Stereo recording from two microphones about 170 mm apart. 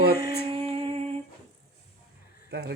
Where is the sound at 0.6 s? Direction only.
35° right (ahead or behind).